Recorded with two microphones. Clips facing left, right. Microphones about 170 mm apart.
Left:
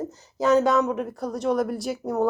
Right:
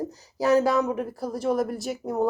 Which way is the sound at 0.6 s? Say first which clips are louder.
Left 2 dB; 30° right (ahead or behind).